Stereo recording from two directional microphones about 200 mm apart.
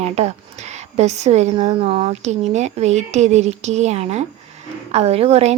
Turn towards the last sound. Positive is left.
turn(degrees=-30)  # may be behind; listen again after turning